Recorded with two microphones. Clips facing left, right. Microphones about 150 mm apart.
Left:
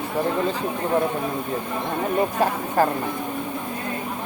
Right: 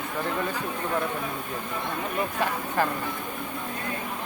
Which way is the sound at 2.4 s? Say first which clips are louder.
Left 3 dB; 40° left (ahead or behind).